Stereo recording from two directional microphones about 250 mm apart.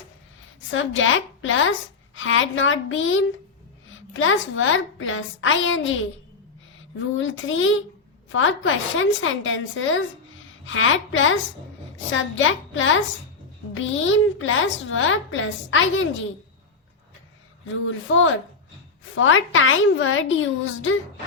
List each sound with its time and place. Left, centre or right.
0.7 s a woman's voice: left
7.2 s a woman's voice: left
17.7 s a woman's voice: left